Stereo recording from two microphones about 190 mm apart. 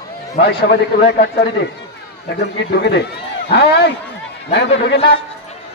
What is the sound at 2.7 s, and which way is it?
A man's voice, 65° left (ahead or behind).